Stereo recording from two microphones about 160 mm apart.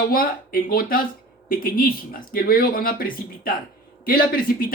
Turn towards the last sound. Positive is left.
turn(degrees=65)  # may be behind; listen again after turning